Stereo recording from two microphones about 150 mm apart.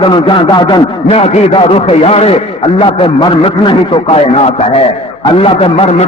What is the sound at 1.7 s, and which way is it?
Speech, 40° left (ahead or behind).